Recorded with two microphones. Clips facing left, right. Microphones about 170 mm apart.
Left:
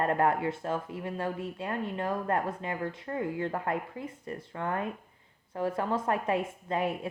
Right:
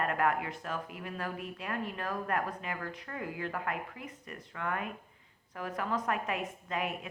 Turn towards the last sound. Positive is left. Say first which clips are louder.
# left 5 dB
turn(degrees=30)  # may be behind; listen again after turning